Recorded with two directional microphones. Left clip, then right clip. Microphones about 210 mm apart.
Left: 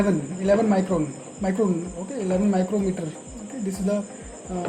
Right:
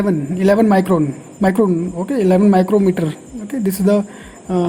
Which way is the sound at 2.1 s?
40° right (ahead or behind).